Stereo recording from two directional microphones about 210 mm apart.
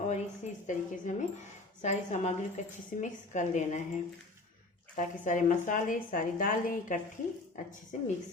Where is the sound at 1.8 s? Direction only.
35° left (ahead or behind).